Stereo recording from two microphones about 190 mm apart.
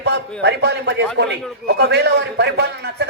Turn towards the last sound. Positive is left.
turn(degrees=-60)  # may be behind; listen again after turning